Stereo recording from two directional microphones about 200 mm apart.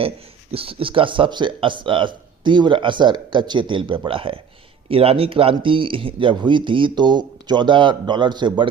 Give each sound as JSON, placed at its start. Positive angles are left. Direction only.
{"t": 0.5, "sound": "speech", "side_deg": -25}